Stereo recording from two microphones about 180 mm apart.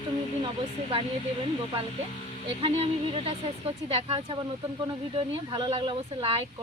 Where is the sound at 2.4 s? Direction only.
30° right (ahead or behind).